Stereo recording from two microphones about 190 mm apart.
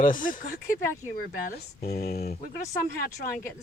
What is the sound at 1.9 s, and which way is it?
Speech, 55° left (ahead or behind).